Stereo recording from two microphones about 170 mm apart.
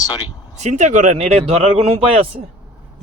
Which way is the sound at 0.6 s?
45° right (ahead or behind).